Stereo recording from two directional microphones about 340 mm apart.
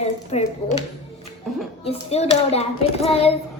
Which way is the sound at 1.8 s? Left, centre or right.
Centre.